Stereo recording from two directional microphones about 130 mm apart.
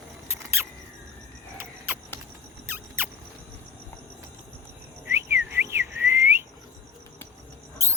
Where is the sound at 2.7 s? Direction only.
15° right (ahead or behind).